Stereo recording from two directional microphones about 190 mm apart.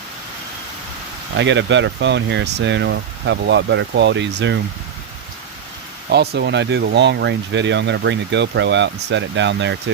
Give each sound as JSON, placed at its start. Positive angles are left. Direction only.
{"t": 1.4, "sound": "speech", "side_deg": -70}
{"t": 6.1, "sound": "speech", "side_deg": -60}